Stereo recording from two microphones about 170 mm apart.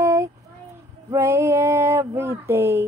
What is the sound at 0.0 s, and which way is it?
Child singing, 15° right (ahead or behind).